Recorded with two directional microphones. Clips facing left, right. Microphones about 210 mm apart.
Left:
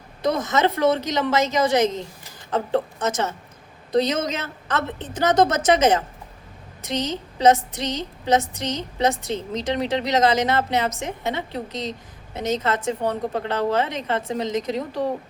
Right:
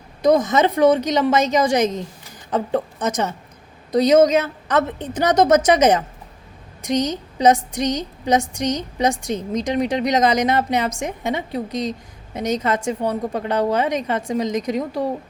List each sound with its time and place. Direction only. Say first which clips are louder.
0.2 s a woman's voice: right 5 dB; 15° right (ahead or behind)